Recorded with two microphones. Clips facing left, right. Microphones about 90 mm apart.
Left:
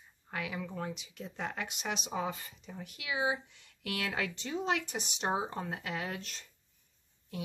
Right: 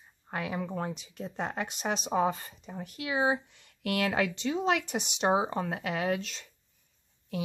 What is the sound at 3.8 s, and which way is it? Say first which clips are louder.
Speech: right 7 dB; 65° right (ahead or behind).